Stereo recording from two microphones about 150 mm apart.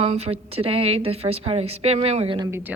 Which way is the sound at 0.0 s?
40° right (ahead or behind).